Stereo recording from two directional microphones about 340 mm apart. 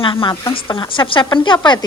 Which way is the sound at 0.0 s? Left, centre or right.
Centre.